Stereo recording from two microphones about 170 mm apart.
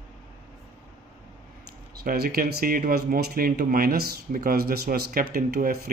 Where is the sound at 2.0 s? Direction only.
60° right (ahead or behind).